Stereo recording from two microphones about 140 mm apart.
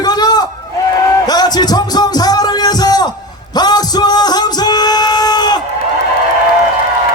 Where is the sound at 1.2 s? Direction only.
30° left (ahead or behind).